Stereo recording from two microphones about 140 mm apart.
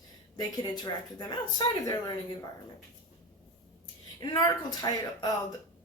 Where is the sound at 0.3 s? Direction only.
30° left (ahead or behind).